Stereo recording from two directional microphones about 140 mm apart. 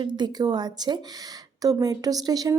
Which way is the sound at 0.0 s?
30° right (ahead or behind).